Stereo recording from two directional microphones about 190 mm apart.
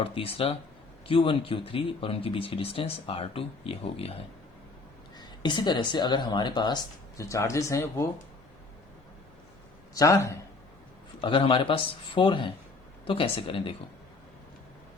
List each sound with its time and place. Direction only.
0.0 s speech: 30° left (ahead or behind)
5.1 s speech: 25° left (ahead or behind)
9.9 s speech: 15° left (ahead or behind)
11.2 s speech: 25° left (ahead or behind)